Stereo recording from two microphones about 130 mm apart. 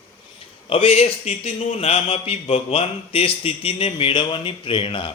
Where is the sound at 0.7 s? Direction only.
45° left (ahead or behind).